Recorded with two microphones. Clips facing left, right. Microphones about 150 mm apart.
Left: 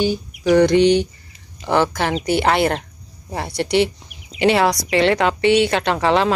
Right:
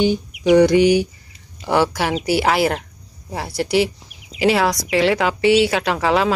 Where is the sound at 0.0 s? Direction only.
20° right (ahead or behind).